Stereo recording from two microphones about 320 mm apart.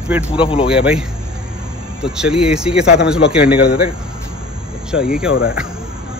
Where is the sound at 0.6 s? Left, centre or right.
Centre.